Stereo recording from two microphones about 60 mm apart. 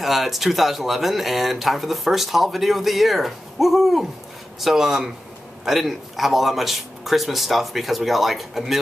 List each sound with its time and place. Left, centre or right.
0.0 s speech: centre